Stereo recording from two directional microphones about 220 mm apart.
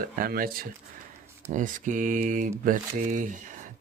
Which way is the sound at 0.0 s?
40° right (ahead or behind).